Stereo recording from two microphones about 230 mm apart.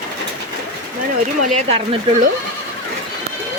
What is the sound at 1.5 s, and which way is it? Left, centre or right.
Speech, right.